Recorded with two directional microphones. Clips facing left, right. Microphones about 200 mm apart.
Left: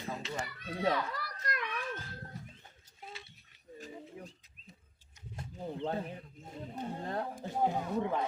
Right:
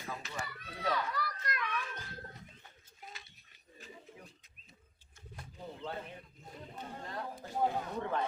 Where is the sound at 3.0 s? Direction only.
30° left (ahead or behind).